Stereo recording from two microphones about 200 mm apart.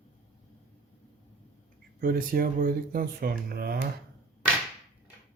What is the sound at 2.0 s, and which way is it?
Speech, 45° right (ahead or behind).